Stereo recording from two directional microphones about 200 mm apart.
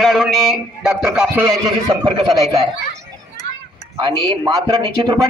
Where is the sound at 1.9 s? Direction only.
25° right (ahead or behind).